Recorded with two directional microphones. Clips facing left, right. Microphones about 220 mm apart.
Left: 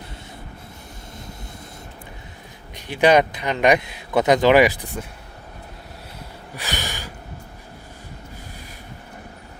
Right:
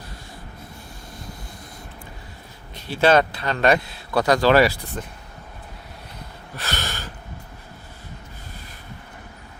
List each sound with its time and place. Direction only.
2.7 s speech: 15° left (ahead or behind)
6.6 s gasp: 15° left (ahead or behind)